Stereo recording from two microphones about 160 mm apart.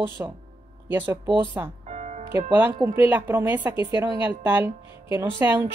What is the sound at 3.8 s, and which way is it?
Speech, 30° left (ahead or behind).